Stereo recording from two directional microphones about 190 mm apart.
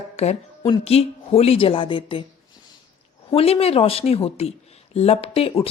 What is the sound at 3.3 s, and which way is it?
Speech, 30° left (ahead or behind).